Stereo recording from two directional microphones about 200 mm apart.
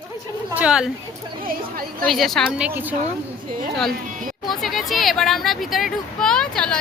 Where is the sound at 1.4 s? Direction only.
45° right (ahead or behind).